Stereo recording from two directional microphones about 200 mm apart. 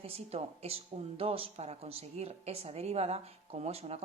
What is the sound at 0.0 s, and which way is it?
A woman's voice, 30° right (ahead or behind).